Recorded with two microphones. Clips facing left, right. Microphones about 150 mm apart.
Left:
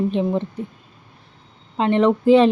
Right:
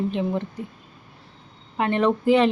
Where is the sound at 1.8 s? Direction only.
20° left (ahead or behind).